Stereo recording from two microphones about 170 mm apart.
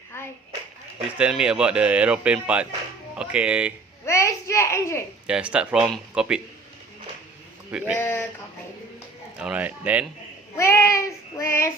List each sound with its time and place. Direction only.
0.1 s clapping: 15° left (ahead or behind)
1.2 s a man's voice: 5° right (ahead or behind)
4.0 s a child's voice: 15° left (ahead or behind)
5.2 s speech: 5° right (ahead or behind)
7.7 s a man's voice: 5° right (ahead or behind)
7.9 s child singing: 15° left (ahead or behind)
9.4 s a man's voice: 5° right (ahead or behind)
10.6 s child singing: 15° left (ahead or behind)